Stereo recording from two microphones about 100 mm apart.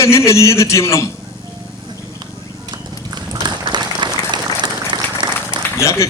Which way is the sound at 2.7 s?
45° right (ahead or behind).